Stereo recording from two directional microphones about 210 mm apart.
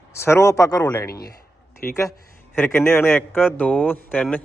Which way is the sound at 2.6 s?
10° left (ahead or behind).